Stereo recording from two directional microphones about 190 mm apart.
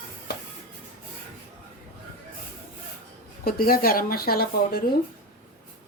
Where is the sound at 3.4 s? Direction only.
50° left (ahead or behind).